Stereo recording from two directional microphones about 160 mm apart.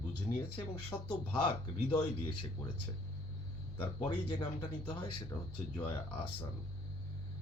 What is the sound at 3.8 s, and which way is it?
Speech, 30° left (ahead or behind).